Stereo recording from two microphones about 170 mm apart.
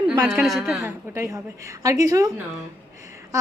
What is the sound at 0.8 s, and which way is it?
Speech, 15° right (ahead or behind).